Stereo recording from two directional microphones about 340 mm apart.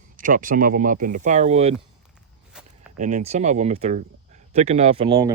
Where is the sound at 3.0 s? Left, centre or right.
Right.